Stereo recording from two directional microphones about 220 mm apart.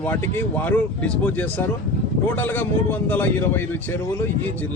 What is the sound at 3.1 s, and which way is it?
Speech, 10° left (ahead or behind).